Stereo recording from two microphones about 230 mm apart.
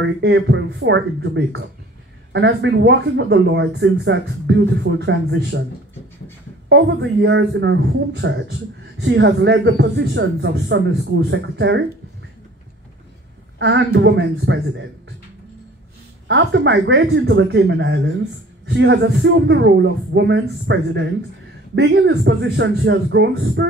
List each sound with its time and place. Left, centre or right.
0.0 s speech: right
6.7 s speech: right
13.6 s speech: right
16.3 s speech: right